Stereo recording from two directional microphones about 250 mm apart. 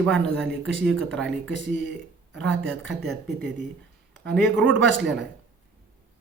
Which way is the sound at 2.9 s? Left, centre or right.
Centre.